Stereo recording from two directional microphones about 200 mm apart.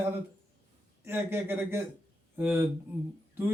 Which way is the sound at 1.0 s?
10° right (ahead or behind).